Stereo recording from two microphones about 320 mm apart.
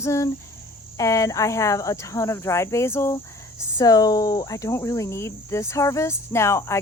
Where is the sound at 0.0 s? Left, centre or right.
Centre.